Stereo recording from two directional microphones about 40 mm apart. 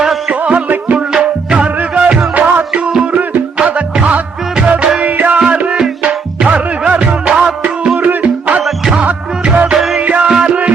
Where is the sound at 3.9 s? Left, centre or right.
Right.